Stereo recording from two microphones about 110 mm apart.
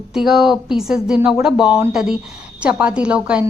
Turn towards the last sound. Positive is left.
turn(degrees=-10)  # may be behind; listen again after turning